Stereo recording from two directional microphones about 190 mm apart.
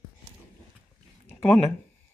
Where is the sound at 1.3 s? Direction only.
10° left (ahead or behind).